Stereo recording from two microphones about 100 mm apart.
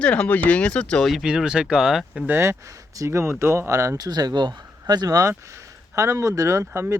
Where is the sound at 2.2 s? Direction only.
25° right (ahead or behind).